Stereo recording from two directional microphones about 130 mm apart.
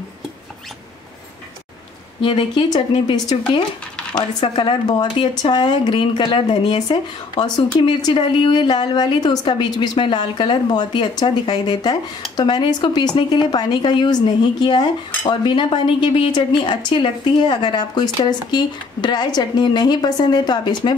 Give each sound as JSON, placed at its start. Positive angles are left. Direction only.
{"t": 2.2, "sound": "a woman's voice", "side_deg": 40}